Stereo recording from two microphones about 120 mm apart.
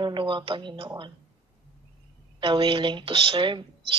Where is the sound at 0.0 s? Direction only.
40° right (ahead or behind).